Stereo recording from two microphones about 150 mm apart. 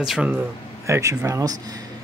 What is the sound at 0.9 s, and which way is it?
Speech, 20° right (ahead or behind).